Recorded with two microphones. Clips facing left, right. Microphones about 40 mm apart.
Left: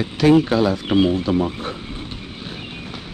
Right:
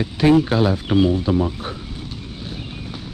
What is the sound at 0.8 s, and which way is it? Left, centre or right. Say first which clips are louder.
Speech: even; left.